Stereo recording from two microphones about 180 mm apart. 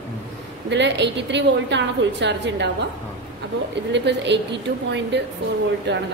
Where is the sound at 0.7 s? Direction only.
75° right (ahead or behind).